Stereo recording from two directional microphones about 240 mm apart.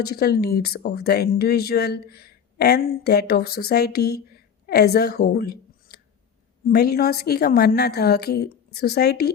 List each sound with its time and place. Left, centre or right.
0.0 s speech: left